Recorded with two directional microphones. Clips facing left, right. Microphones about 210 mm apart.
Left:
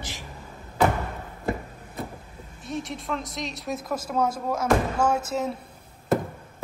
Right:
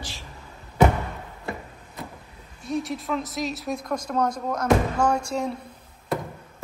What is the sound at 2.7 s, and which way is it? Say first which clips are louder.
Speech: right 4 dB; centre (ahead or behind).